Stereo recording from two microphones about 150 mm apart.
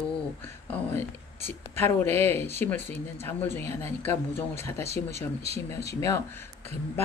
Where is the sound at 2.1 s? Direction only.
15° left (ahead or behind).